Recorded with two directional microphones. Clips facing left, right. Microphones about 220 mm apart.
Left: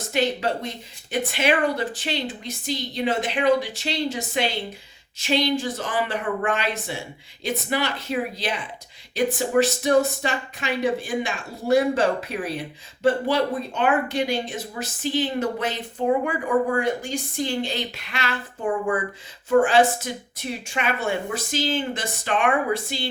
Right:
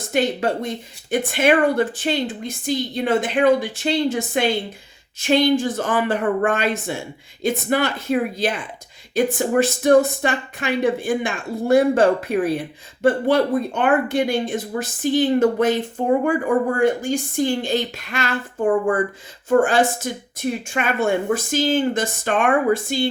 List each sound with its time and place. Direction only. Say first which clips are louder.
0.1 s speech: right 3 dB; 50° right (ahead or behind)